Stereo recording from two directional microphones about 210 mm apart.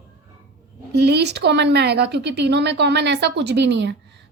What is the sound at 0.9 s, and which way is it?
A woman's voice, 50° right (ahead or behind).